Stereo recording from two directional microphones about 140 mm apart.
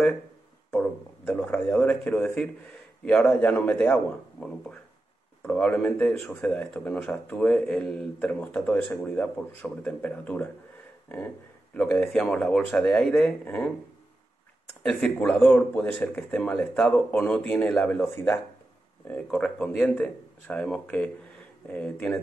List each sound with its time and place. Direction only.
0.7 s speech: 10° left (ahead or behind)
14.8 s speech: 5° left (ahead or behind)
19.0 s speech: 10° left (ahead or behind)